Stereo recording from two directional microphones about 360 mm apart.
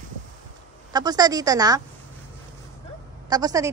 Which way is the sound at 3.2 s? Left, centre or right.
Centre.